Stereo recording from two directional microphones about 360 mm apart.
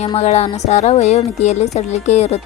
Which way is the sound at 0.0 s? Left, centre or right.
Centre.